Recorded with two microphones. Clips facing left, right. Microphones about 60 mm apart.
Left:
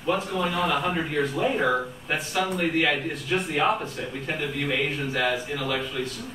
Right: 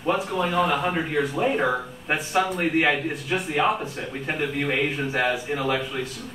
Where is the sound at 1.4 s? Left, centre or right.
Centre.